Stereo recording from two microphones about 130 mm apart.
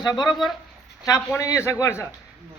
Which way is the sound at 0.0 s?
30° left (ahead or behind).